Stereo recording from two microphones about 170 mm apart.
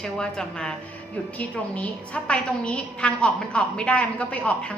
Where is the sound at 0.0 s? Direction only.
5° left (ahead or behind).